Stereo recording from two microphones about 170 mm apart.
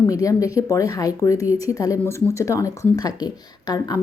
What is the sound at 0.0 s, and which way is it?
Speech, 20° left (ahead or behind).